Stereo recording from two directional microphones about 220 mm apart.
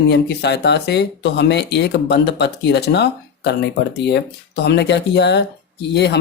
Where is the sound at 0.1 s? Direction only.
50° left (ahead or behind).